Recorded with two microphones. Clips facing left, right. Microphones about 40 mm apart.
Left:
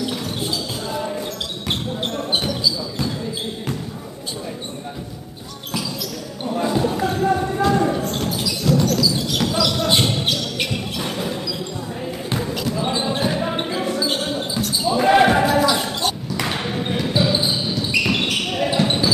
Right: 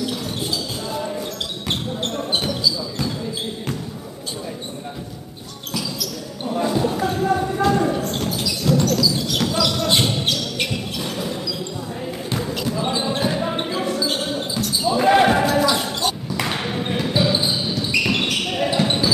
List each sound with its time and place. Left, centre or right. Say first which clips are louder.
0.8 s basketball bounce: left 1 dB; centre
5.7 s basketball bounce: even; left
6.4 s basketball bounce: even; centre
9.0 s a sound: even; centre
9.8 s basketball bounce: left 1 dB; centre
11.0 s basketball bounce: left 2 dB; left
12.4 s basketball bounce: even; centre
16.3 s a sound: even; centre
17.0 s basketball bounce: even; centre